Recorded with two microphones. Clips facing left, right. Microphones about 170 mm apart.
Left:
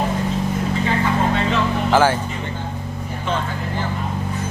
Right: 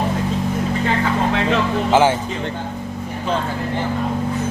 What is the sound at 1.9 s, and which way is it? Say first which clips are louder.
Speech: right 1 dB; 20° right (ahead or behind).